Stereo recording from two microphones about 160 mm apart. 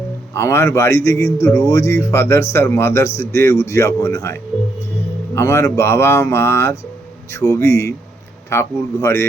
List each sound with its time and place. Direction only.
0.3 s speech: 15° left (ahead or behind)